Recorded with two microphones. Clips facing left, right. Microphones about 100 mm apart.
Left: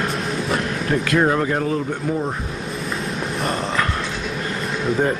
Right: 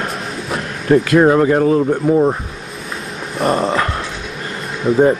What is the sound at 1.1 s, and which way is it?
Speech, 30° right (ahead or behind).